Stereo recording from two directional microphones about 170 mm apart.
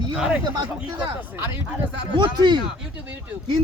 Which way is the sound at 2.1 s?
25° right (ahead or behind).